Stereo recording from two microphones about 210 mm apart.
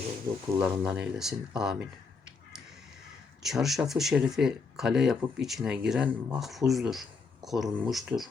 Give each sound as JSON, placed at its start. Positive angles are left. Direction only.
{"t": 0.6, "sound": "speech", "side_deg": -5}
{"t": 3.4, "sound": "speech", "side_deg": 0}